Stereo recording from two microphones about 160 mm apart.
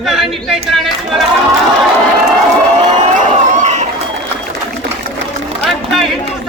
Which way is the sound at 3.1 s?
50° right (ahead or behind).